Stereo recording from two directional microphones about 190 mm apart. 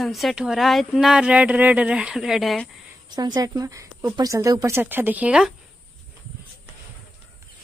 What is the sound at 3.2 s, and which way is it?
Speech, 20° right (ahead or behind).